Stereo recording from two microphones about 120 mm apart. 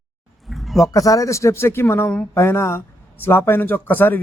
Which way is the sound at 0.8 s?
30° left (ahead or behind).